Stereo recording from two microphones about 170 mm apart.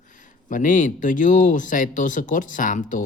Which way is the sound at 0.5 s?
50° left (ahead or behind).